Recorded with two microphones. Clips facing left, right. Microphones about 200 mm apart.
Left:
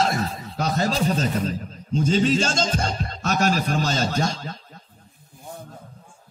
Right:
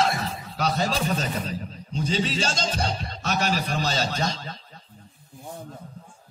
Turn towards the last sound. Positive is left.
turn(degrees=45)  # may be behind; listen again after turning